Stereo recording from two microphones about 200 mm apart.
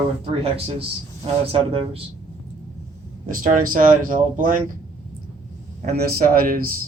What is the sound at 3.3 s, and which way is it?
Speech, 45° right (ahead or behind).